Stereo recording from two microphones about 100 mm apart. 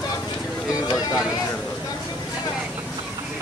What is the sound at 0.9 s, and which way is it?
Speech, 5° right (ahead or behind).